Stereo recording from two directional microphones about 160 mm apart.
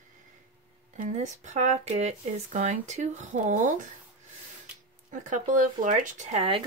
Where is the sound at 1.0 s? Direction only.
50° right (ahead or behind).